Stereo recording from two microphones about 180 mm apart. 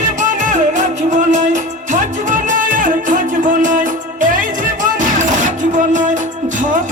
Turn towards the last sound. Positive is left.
turn(degrees=-45)  # may be behind; listen again after turning